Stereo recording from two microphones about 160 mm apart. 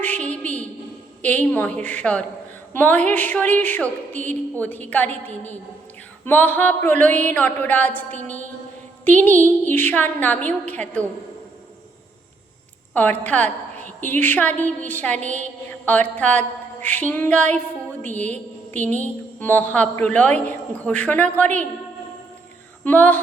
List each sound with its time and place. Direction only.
0.0 s a sound: 10° left (ahead or behind)
1.2 s a woman's voice: 10° left (ahead or behind)
12.9 s a woman's voice: 10° left (ahead or behind)
18.3 s a sound: 50° right (ahead or behind)
18.9 s a woman's voice: 10° left (ahead or behind)
22.8 s a woman's voice: 10° left (ahead or behind)